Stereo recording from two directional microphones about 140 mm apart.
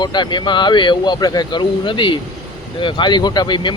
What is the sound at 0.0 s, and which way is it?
Speech, 30° left (ahead or behind).